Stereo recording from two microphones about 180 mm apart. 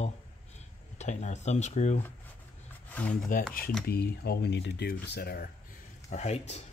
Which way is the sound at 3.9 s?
60° left (ahead or behind).